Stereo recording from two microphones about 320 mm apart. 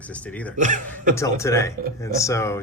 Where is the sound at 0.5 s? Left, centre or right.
Right.